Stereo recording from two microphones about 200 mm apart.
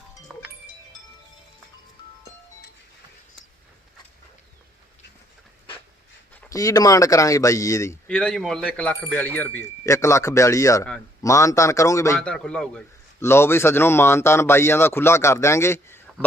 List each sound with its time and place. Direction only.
6.4 s a man's voice: 15° left (ahead or behind)
8.0 s a man's voice: 5° left (ahead or behind)
12.3 s a man's voice: 5° left (ahead or behind)